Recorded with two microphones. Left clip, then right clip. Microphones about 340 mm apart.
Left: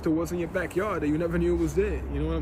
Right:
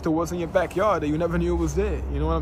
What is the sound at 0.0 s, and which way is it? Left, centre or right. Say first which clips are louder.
Speech: right 2 dB; centre.